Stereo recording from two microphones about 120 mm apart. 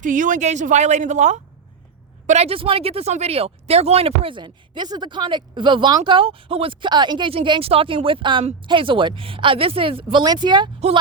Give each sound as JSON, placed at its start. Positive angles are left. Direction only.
{"t": 0.0, "sound": "speech", "side_deg": -90}
{"t": 2.2, "sound": "speech", "side_deg": -65}